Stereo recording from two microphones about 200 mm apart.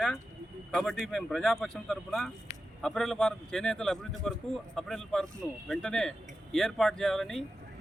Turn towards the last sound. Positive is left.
turn(degrees=0)  # may be behind; listen again after turning